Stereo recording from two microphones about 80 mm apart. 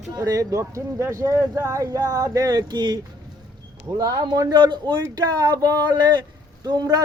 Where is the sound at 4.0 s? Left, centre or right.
Right.